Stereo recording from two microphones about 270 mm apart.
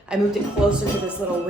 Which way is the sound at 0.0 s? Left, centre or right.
Centre.